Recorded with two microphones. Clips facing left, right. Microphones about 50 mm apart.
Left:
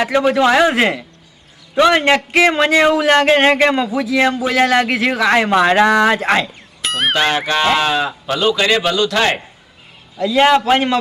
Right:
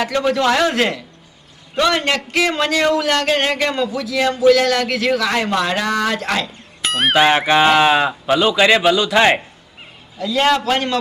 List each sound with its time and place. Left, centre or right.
0.0 s a man's voice: centre
6.8 s speech: centre
7.3 s speech: centre
10.3 s a man's voice: left